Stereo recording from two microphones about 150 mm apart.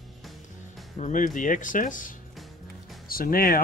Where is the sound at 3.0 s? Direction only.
75° left (ahead or behind).